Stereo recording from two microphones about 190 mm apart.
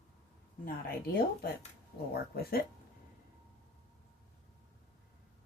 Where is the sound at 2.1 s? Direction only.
55° left (ahead or behind).